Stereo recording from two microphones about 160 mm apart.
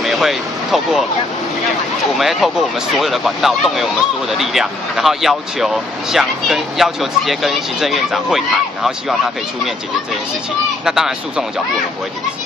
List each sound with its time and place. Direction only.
0.0 s vehicle: centre (ahead or behind)
2.1 s speech: centre (ahead or behind)
10.9 s speech: 5° right (ahead or behind)